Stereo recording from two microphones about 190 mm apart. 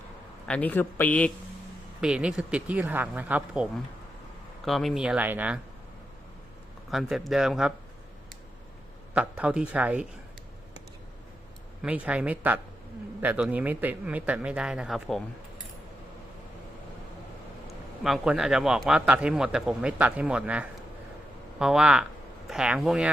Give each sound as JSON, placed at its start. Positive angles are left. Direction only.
{"t": 0.4, "sound": "speech", "side_deg": 5}
{"t": 2.0, "sound": "speech", "side_deg": -5}
{"t": 6.9, "sound": "speech", "side_deg": 0}
{"t": 9.1, "sound": "speech", "side_deg": -5}
{"t": 11.8, "sound": "speech", "side_deg": -5}
{"t": 18.0, "sound": "speech", "side_deg": 0}